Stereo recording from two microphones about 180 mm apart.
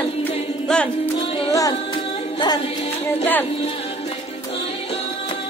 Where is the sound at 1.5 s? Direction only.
20° left (ahead or behind).